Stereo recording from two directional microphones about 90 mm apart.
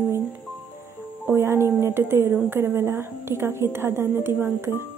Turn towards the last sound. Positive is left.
turn(degrees=-25)  # may be behind; listen again after turning